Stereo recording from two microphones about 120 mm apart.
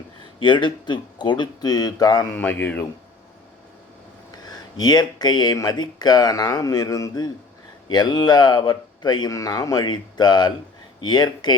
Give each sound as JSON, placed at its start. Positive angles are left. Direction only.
{"t": 0.4, "sound": "speech", "side_deg": 40}
{"t": 2.3, "sound": "speech", "side_deg": 15}
{"t": 4.3, "sound": "speech", "side_deg": 35}